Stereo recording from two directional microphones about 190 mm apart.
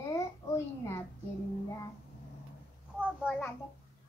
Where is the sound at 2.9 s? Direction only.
5° left (ahead or behind).